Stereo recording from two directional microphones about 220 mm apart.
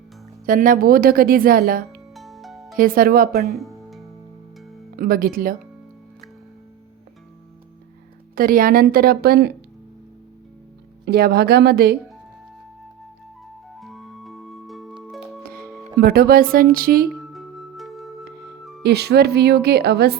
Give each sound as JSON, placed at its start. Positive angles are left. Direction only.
{"t": 0.4, "sound": "speech", "side_deg": -40}
{"t": 2.1, "sound": "music", "side_deg": 0}
{"t": 2.7, "sound": "speech", "side_deg": -40}
{"t": 3.5, "sound": "music", "side_deg": 0}
{"t": 4.9, "sound": "speech", "side_deg": -40}
{"t": 8.4, "sound": "speech", "side_deg": -40}
{"t": 11.0, "sound": "speech", "side_deg": -45}
{"t": 13.7, "sound": "organ", "side_deg": 0}
{"t": 15.0, "sound": "music", "side_deg": 0}
{"t": 15.4, "sound": "music", "side_deg": -45}
{"t": 16.0, "sound": "speech", "side_deg": -45}
{"t": 17.1, "sound": "music", "side_deg": 0}
{"t": 18.8, "sound": "speech", "side_deg": -45}